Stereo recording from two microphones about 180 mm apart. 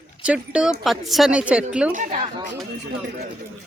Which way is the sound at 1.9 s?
45° right (ahead or behind).